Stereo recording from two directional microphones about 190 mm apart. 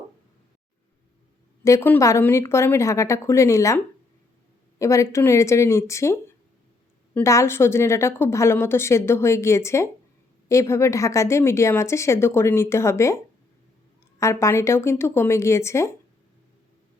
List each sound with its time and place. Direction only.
1.6 s a woman's voice: 15° left (ahead or behind)
4.8 s a woman's voice: 15° left (ahead or behind)
14.2 s a woman's voice: 15° left (ahead or behind)